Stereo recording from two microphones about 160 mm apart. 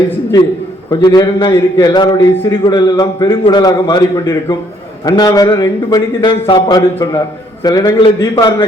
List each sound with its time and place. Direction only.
0.9 s speech: 25° left (ahead or behind)